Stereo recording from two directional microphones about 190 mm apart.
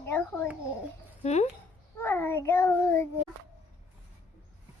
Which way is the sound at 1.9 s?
10° left (ahead or behind).